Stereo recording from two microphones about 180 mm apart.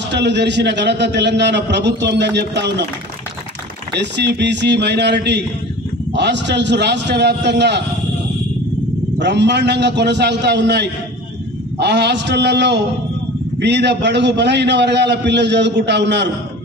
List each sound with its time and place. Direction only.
0.1 s a man's voice: 75° right (ahead or behind)
3.9 s a man's voice: 70° right (ahead or behind)
9.2 s a man's voice: 75° right (ahead or behind)